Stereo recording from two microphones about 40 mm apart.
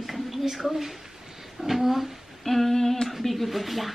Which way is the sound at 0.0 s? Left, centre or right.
Centre.